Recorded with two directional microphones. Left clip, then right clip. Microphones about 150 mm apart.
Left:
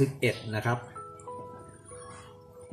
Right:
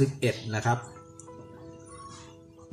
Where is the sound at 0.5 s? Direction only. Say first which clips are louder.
Right 3 dB; 30° right (ahead or behind).